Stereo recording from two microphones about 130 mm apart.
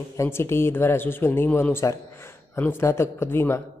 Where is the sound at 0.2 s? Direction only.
20° left (ahead or behind).